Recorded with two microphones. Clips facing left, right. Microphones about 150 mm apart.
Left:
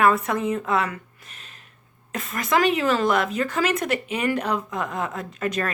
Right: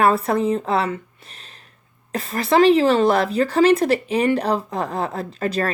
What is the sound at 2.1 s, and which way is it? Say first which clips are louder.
Speech: right 4 dB; 35° right (ahead or behind).